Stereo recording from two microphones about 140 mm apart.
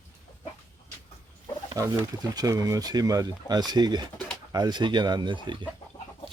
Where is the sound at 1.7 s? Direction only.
25° right (ahead or behind).